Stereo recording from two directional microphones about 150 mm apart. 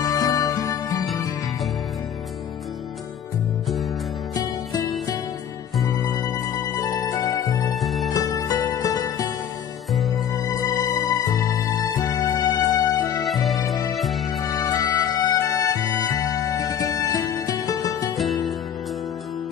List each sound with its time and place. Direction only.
0.0 s music: 25° left (ahead or behind)
5.9 s music: 25° left (ahead or behind)
7.7 s music: centre (ahead or behind)
8.1 s music: 25° left (ahead or behind)
11.1 s music: 25° left (ahead or behind)
13.9 s music: centre (ahead or behind)
14.4 s music: 20° left (ahead or behind)
18.1 s music: centre (ahead or behind)